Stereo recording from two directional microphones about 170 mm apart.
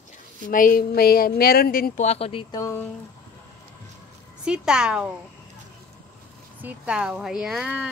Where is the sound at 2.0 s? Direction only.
35° left (ahead or behind).